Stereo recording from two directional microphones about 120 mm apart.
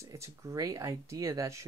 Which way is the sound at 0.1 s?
25° right (ahead or behind).